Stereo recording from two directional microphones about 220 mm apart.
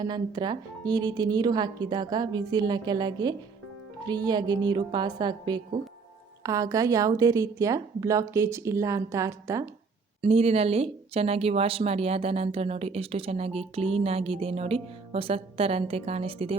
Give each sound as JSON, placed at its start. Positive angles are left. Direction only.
{"t": 0.0, "sound": "a woman's voice", "side_deg": -20}
{"t": 10.2, "sound": "speech", "side_deg": -25}